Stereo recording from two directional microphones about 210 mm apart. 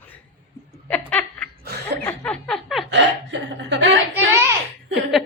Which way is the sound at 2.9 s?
55° right (ahead or behind).